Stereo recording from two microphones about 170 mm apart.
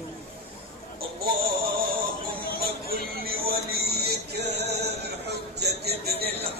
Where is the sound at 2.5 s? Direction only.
60° right (ahead or behind).